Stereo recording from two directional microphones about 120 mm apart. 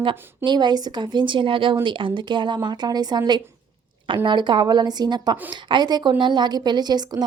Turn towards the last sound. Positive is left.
turn(degrees=-35)  # may be behind; listen again after turning